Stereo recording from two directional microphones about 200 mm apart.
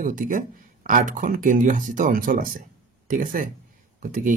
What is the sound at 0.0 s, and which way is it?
Speech, 40° right (ahead or behind).